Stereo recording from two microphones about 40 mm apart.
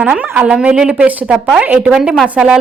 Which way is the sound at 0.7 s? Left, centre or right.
Centre.